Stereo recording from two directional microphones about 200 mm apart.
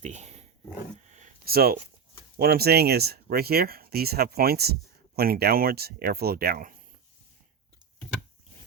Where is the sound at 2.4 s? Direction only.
50° right (ahead or behind).